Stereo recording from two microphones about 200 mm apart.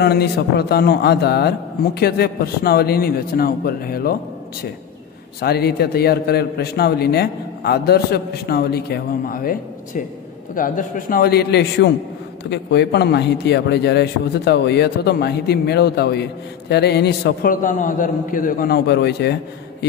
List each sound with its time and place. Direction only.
0.0 s a man's voice: 55° left (ahead or behind)
5.4 s a man's voice: 55° left (ahead or behind)